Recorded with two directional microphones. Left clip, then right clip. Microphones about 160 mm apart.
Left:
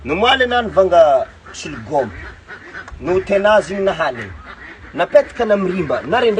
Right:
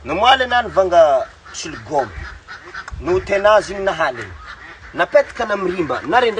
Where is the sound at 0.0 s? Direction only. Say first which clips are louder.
Even; 15° right (ahead or behind).